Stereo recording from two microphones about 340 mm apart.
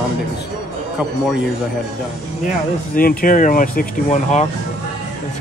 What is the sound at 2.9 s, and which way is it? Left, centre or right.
Speech, left.